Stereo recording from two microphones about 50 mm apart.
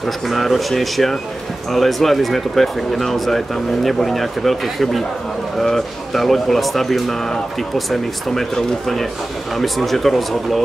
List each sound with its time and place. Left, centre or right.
0.0 s speech: centre